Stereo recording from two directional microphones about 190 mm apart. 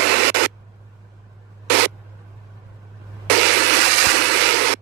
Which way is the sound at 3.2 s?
60° right (ahead or behind).